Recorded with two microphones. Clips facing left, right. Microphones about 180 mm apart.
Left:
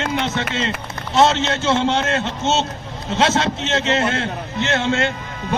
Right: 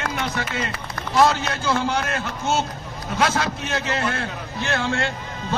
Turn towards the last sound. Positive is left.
turn(degrees=20)  # may be behind; listen again after turning